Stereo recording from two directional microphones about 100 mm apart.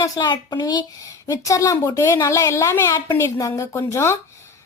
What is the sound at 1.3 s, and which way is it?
A woman's voice, 35° left (ahead or behind).